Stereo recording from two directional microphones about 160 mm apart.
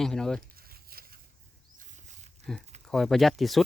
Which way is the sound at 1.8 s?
50° right (ahead or behind).